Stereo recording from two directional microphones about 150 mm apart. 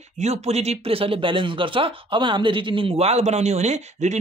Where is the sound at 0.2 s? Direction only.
45° right (ahead or behind).